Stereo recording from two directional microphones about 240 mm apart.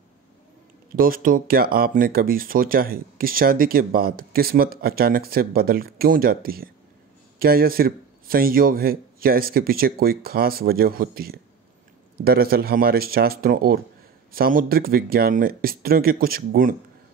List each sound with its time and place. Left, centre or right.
0.9 s speech: right